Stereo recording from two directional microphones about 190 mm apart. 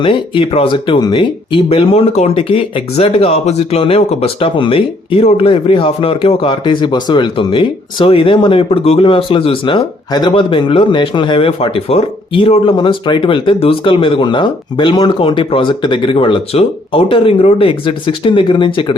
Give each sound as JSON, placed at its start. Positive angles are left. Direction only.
{"t": 0.0, "sound": "speech", "side_deg": 25}